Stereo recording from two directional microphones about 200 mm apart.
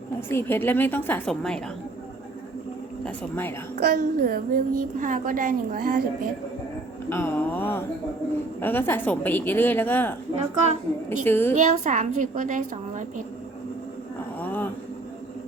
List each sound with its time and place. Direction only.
0.3 s a woman's voice: 10° left (ahead or behind)
3.0 s a woman's voice: 10° left (ahead or behind)
3.8 s a child's voice: 50° right (ahead or behind)
7.1 s a woman's voice: 10° left (ahead or behind)
10.3 s a woman's voice: 35° right (ahead or behind)
11.3 s a woman's voice: 10° left (ahead or behind)
11.5 s a woman's voice: 35° right (ahead or behind)
14.3 s a sound: 10° left (ahead or behind)